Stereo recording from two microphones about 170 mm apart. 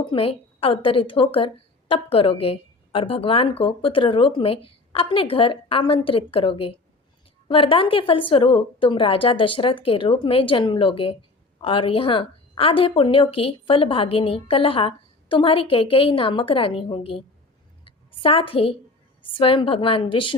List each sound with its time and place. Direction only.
0.0 s a woman's voice: 30° left (ahead or behind)